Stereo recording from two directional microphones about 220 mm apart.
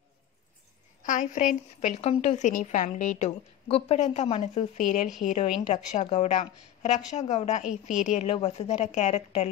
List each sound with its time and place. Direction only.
1.0 s a woman's voice: 35° left (ahead or behind)